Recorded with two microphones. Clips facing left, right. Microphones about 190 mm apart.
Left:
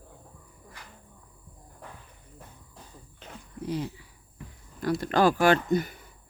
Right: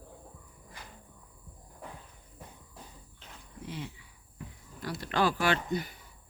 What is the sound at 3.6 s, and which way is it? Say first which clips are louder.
Speech: left 9 dB; 40° left (ahead or behind).